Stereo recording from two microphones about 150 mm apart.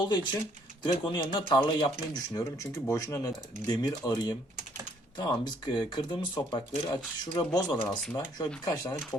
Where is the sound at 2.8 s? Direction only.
20° left (ahead or behind).